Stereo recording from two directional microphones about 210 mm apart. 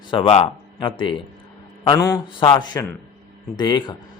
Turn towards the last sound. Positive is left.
turn(degrees=20)  # may be behind; listen again after turning